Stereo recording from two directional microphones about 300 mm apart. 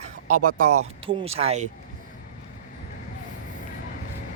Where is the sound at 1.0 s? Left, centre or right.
Centre.